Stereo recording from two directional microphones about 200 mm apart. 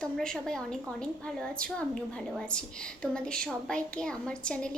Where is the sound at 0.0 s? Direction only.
5° left (ahead or behind).